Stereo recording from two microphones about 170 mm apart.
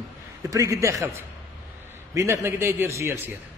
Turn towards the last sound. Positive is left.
turn(degrees=-15)  # may be behind; listen again after turning